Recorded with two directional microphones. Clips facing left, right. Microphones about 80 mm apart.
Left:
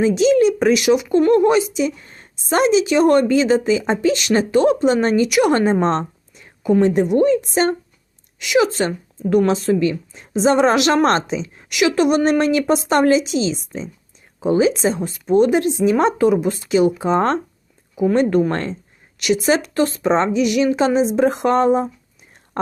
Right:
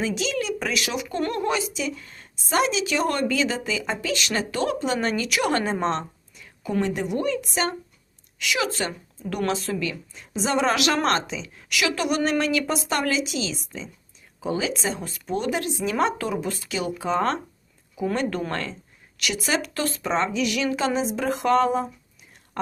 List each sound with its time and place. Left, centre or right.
0.0 s a woman's voice: left
8.4 s a woman's voice: left